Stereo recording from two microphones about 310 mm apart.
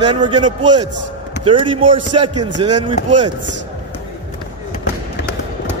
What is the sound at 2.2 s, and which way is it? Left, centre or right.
Speech, right.